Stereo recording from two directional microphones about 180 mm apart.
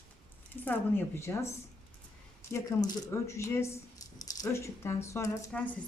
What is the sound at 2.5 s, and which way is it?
Speech, 20° left (ahead or behind).